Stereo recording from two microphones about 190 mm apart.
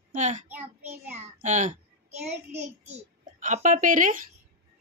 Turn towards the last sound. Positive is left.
turn(degrees=-45)  # may be behind; listen again after turning